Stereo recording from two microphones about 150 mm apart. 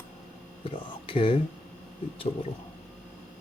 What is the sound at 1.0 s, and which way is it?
Speech, 35° left (ahead or behind).